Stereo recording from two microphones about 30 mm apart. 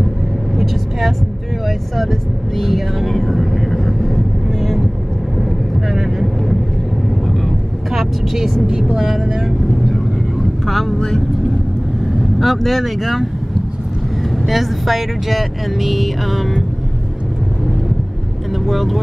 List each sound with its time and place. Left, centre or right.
1.7 s vehicle: centre
5.9 s vehicle: centre
7.9 s vehicle: centre
8.6 s a woman's voice: right
8.9 s speech: centre
10.7 s vehicle: centre
11.0 s speech: centre
12.2 s speech: centre
14.5 s speech: centre
18.6 s speech: centre